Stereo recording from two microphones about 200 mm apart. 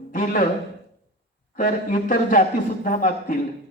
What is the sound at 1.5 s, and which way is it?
Speech, 45° left (ahead or behind).